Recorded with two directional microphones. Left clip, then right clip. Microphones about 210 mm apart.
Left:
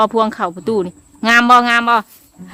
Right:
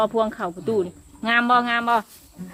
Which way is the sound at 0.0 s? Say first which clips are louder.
Left 7 dB; 40° left (ahead or behind).